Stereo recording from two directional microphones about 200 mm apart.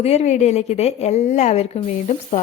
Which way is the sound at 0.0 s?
30° left (ahead or behind).